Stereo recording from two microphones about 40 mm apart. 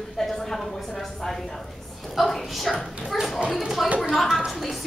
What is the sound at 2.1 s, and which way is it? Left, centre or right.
Speech, centre.